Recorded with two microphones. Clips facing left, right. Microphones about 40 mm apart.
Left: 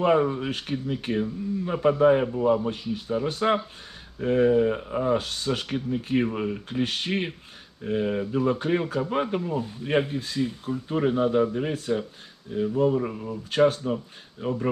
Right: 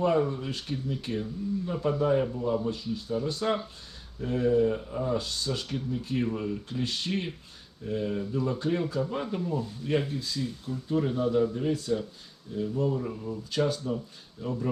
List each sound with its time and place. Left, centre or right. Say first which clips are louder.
0.0 s speech: left 4 dB; left